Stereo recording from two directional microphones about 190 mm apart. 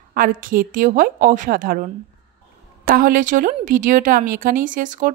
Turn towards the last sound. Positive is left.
turn(degrees=-45)  # may be behind; listen again after turning